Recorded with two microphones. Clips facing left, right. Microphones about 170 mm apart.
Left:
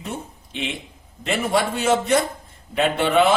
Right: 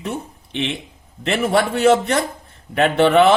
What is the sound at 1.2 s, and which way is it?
A man's voice, 65° right (ahead or behind).